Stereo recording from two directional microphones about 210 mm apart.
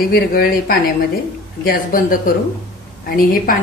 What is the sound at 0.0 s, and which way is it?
A woman's voice, 50° left (ahead or behind).